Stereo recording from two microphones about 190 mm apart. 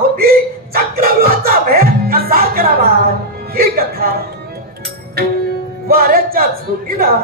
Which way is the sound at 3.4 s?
50° right (ahead or behind).